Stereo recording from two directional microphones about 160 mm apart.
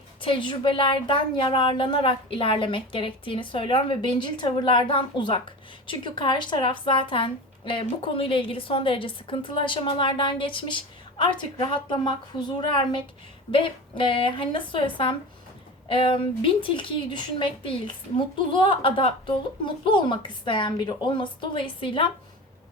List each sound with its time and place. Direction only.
0.2 s a woman's voice: 30° left (ahead or behind)